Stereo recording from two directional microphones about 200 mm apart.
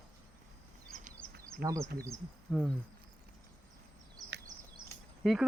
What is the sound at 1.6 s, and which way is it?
Speech, 15° right (ahead or behind).